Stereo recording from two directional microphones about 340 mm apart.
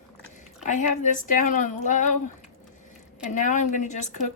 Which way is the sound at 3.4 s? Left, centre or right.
Left.